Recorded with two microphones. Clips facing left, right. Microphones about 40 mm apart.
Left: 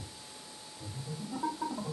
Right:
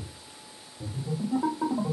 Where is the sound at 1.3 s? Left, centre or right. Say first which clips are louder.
Right 7 dB; centre.